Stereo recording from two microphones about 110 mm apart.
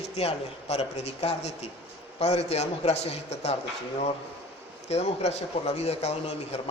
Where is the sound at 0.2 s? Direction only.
70° left (ahead or behind).